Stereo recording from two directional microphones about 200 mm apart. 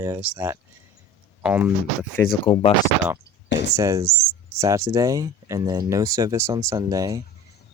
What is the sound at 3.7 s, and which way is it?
Speech, 15° right (ahead or behind).